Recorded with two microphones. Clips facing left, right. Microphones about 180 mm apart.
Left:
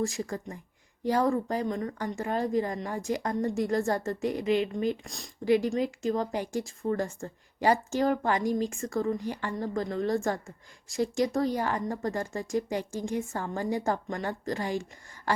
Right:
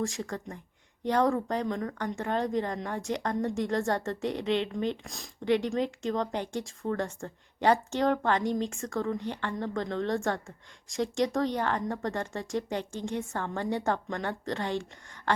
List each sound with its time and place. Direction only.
0.0 s speech: 5° left (ahead or behind)